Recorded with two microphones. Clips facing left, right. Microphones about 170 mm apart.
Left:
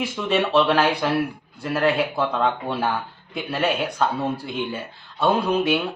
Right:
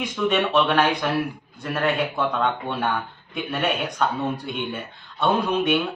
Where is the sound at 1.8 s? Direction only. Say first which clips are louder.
Left 2 dB; 30° left (ahead or behind).